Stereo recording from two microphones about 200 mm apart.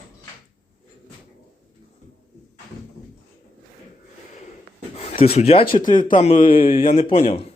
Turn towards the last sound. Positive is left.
turn(degrees=30)  # may be behind; listen again after turning